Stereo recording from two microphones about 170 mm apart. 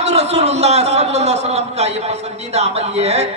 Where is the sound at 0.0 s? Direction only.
40° right (ahead or behind).